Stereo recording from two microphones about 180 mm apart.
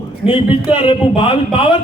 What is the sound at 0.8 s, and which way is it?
Speech, 30° left (ahead or behind).